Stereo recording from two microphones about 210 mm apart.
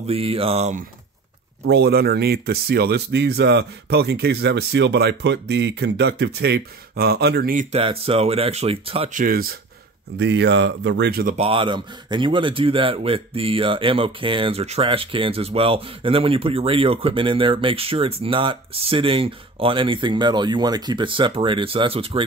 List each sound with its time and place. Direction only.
0.0 s speech: 25° right (ahead or behind)
1.7 s speech: 50° right (ahead or behind)
7.7 s speech: 25° right (ahead or behind)
9.1 s speech: 45° right (ahead or behind)
10.1 s speech: 55° right (ahead or behind)
11.3 s speech: 25° right (ahead or behind)